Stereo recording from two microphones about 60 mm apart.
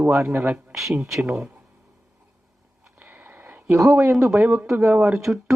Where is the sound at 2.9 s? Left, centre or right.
Right.